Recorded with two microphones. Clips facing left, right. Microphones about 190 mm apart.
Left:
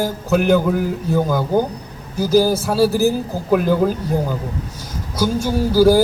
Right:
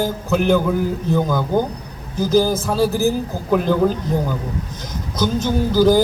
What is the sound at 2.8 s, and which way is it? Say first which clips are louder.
Speech: left 2 dB; 15° right (ahead or behind).